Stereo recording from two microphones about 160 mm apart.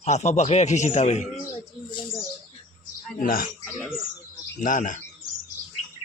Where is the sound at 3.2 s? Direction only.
65° left (ahead or behind).